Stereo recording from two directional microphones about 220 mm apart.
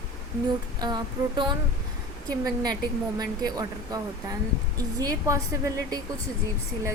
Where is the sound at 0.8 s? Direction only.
20° right (ahead or behind).